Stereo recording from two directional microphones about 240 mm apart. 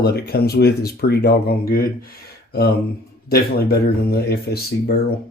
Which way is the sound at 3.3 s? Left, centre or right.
Left.